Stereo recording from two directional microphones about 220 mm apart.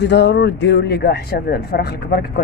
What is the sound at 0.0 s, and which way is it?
Speech, 50° left (ahead or behind).